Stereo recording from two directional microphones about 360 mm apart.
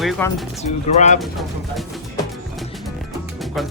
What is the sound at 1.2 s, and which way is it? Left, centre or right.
Speech, centre.